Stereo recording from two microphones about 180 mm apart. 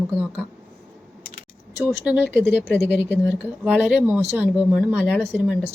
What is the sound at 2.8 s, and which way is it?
Speech, 70° left (ahead or behind).